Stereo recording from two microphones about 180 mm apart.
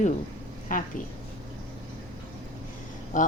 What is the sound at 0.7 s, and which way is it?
Speech, 50° left (ahead or behind).